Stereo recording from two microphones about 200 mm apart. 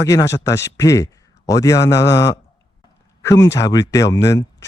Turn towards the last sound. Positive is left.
turn(degrees=15)  # may be behind; listen again after turning